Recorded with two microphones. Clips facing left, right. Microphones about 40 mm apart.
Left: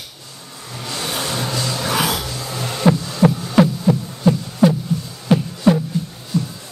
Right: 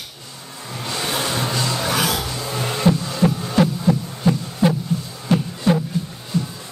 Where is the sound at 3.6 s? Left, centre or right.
Centre.